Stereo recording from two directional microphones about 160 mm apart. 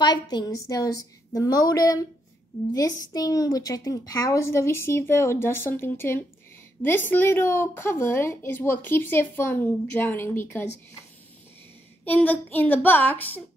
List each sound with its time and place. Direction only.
0.0 s a woman's voice: 25° left (ahead or behind)
12.0 s speech: 10° left (ahead or behind)